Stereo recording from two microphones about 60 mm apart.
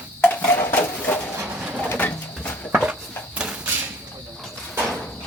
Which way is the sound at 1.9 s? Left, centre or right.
Left.